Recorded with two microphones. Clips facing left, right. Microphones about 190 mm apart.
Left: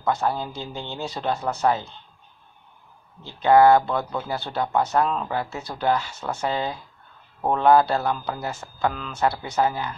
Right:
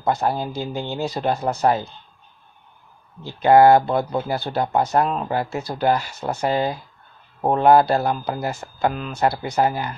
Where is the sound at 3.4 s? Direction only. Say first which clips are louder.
Right 2 dB; 40° right (ahead or behind).